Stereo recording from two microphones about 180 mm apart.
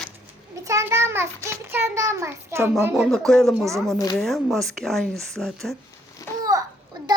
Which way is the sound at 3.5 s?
15° right (ahead or behind).